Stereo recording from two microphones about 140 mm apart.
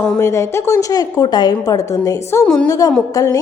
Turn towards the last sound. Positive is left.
turn(degrees=25)  # may be behind; listen again after turning